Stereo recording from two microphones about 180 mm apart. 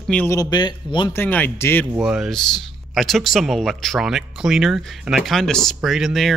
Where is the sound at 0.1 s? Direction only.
10° left (ahead or behind).